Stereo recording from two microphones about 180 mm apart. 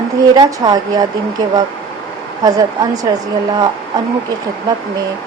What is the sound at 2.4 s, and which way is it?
Speech, 20° right (ahead or behind).